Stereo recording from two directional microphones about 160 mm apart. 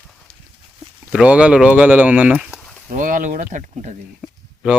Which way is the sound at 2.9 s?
55° right (ahead or behind).